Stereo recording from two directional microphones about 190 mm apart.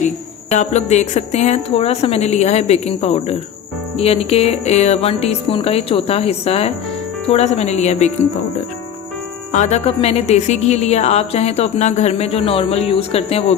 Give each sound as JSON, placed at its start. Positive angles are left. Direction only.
{"t": 0.5, "sound": "speech", "side_deg": 35}
{"t": 9.5, "sound": "speech", "side_deg": 35}